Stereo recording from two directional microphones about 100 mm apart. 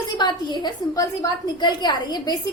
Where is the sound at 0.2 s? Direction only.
45° left (ahead or behind).